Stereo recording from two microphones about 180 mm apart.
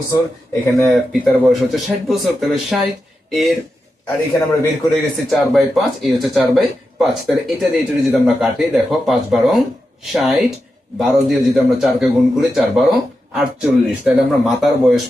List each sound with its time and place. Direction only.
0.8 s a man's voice: 10° left (ahead or behind)
1.5 s speech: centre (ahead or behind)
4.0 s a man's voice: 15° left (ahead or behind)
5.1 s speech: centre (ahead or behind)